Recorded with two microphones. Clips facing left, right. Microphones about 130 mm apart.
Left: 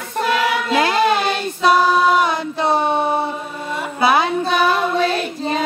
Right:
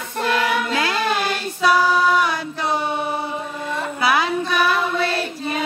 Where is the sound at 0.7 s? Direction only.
25° left (ahead or behind).